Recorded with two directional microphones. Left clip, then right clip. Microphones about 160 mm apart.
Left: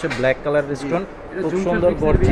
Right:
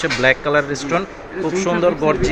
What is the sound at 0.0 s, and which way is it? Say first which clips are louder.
Speech: right 4 dB; centre (ahead or behind).